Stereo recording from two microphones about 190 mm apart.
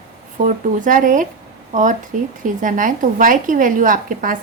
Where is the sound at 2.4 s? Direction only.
45° right (ahead or behind).